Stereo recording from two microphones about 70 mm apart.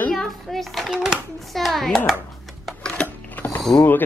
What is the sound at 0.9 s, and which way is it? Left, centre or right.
Speech, centre.